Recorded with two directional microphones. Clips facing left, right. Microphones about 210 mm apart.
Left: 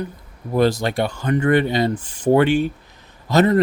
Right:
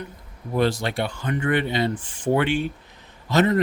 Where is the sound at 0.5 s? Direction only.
40° left (ahead or behind).